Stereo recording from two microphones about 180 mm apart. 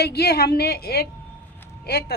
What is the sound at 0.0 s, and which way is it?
A woman's voice, 60° left (ahead or behind).